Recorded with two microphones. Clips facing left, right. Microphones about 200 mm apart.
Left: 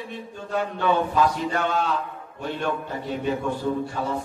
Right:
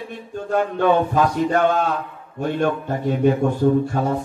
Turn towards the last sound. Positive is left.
turn(degrees=-50)  # may be behind; listen again after turning